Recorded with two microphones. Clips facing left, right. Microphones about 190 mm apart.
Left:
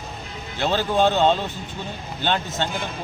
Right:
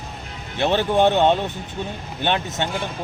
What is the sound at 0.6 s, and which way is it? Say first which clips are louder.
Speech: right 2 dB; 20° right (ahead or behind).